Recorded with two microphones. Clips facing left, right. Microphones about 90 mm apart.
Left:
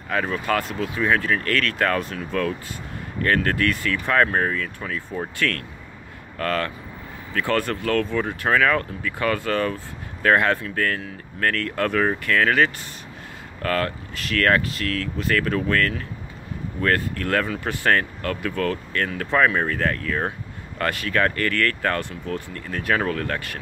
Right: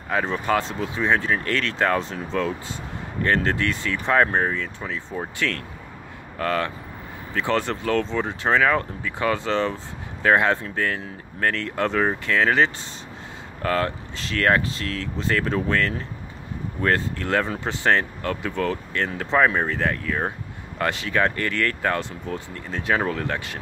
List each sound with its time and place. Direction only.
0.1 s speech: 20° right (ahead or behind)